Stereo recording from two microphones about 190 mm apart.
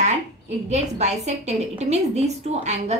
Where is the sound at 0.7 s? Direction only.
35° right (ahead or behind).